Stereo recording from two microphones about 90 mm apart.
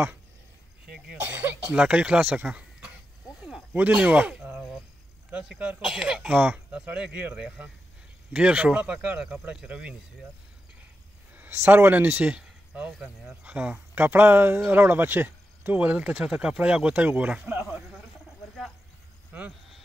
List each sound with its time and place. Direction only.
0.8 s cough: 5° right (ahead or behind)
1.3 s a sound: 20° right (ahead or behind)
3.7 s speech: 15° right (ahead or behind)
11.3 s speech: 20° right (ahead or behind)